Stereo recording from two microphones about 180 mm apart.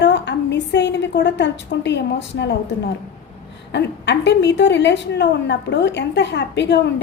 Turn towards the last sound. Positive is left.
turn(degrees=75)  # may be behind; listen again after turning